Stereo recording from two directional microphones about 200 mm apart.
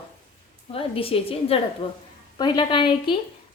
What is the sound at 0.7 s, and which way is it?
A woman's voice, 25° left (ahead or behind).